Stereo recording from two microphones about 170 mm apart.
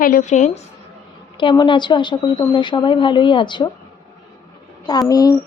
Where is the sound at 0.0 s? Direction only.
50° left (ahead or behind).